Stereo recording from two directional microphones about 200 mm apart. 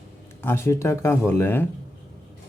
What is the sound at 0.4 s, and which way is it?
Speech, 10° left (ahead or behind).